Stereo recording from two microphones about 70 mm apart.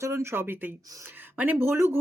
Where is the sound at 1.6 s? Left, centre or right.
Right.